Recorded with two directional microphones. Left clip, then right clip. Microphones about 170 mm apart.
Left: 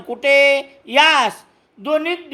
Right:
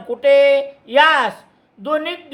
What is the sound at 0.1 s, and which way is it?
A man's voice, 25° left (ahead or behind).